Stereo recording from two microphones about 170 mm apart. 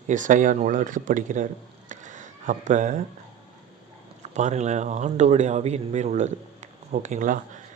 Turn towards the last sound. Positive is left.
turn(degrees=-50)  # may be behind; listen again after turning